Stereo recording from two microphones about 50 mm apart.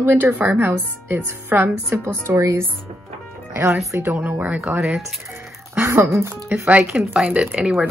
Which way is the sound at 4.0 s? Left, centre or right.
Right.